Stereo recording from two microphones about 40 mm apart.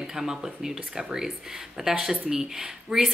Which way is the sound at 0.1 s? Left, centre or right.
Centre.